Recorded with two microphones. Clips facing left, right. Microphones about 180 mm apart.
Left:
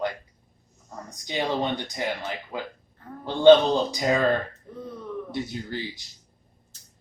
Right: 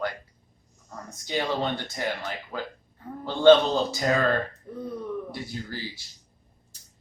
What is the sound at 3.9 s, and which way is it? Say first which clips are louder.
Speech: left 1 dB; 15° left (ahead or behind).